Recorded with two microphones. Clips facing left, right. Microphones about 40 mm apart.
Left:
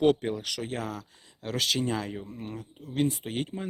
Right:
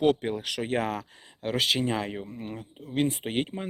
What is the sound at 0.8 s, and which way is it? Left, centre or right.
Speech, right.